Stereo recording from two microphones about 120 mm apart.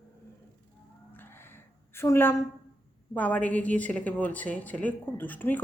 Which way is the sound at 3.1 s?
10° left (ahead or behind).